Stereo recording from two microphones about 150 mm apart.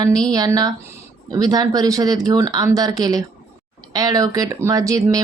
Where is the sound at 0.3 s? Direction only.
25° right (ahead or behind).